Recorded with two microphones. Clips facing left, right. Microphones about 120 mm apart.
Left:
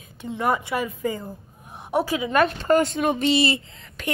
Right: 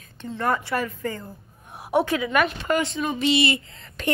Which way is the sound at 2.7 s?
45° left (ahead or behind).